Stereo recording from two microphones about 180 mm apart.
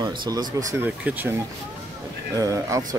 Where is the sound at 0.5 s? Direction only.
15° right (ahead or behind).